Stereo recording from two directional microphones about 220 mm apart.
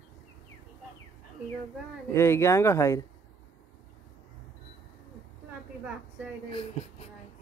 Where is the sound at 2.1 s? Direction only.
10° left (ahead or behind).